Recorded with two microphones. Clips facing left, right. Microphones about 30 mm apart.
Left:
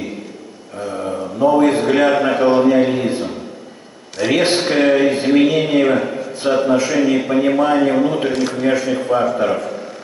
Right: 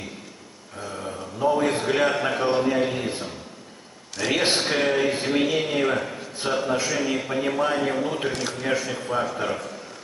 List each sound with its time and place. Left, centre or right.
0.7 s a man's voice: left
8.4 s a man's voice: centre